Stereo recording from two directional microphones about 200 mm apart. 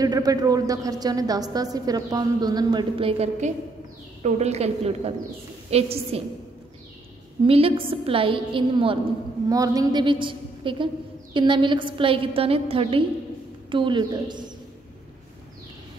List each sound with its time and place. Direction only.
0.0 s a woman's voice: 20° right (ahead or behind)
7.4 s a woman's voice: 30° right (ahead or behind)